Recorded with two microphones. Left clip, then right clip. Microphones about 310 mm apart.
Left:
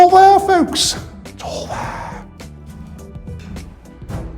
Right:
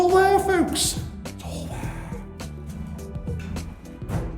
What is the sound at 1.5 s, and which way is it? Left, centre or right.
Music, left.